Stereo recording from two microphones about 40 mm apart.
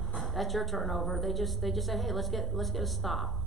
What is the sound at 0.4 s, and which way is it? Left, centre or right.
A man's voice, centre.